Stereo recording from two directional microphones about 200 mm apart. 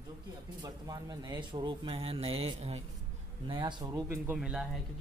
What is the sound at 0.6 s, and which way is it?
Speech, 20° right (ahead or behind).